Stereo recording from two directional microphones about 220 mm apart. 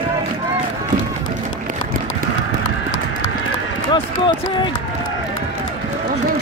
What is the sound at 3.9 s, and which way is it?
Speech, 20° left (ahead or behind).